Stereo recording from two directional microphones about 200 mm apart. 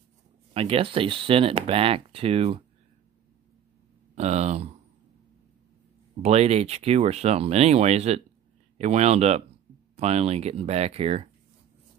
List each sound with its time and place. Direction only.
0.5 s speech: 30° right (ahead or behind)
4.1 s speech: 35° right (ahead or behind)
6.2 s speech: 30° right (ahead or behind)